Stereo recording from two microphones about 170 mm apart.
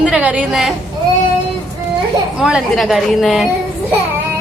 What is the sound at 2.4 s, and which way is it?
A woman's voice, 5° right (ahead or behind).